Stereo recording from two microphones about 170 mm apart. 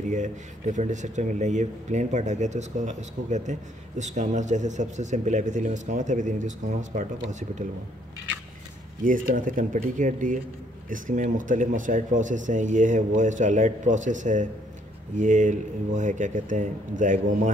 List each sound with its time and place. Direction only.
0.1 s speech: 45° right (ahead or behind)
9.0 s speech: 50° right (ahead or behind)